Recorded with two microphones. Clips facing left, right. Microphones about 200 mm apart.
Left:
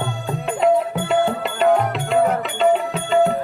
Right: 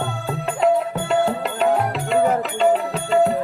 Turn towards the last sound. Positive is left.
turn(degrees=0)  # may be behind; listen again after turning